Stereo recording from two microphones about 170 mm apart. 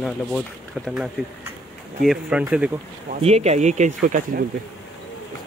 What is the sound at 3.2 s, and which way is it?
Speech, 40° right (ahead or behind).